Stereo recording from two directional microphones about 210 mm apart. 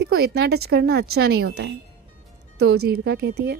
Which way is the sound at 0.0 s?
50° right (ahead or behind).